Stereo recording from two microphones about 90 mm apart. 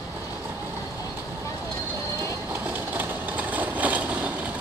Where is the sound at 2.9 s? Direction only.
20° right (ahead or behind).